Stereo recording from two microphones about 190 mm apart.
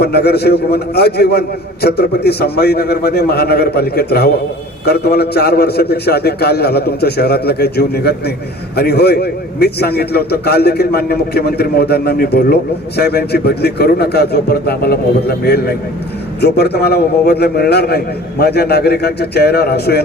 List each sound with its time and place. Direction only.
0.0 s a man's voice: 55° left (ahead or behind)